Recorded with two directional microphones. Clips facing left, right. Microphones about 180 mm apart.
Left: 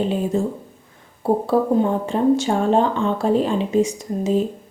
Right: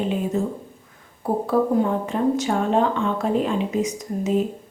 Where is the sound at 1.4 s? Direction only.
30° left (ahead or behind).